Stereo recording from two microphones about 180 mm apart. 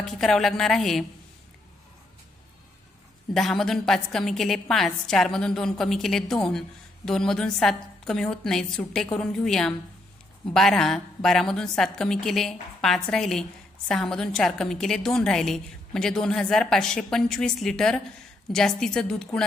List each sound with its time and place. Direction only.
0.0 s a woman's voice: centre (ahead or behind)
3.3 s a woman's voice: centre (ahead or behind)